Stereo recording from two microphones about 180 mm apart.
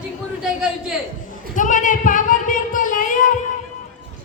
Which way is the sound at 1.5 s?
45° left (ahead or behind).